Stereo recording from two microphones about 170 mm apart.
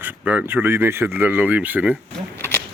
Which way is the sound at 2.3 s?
15° left (ahead or behind).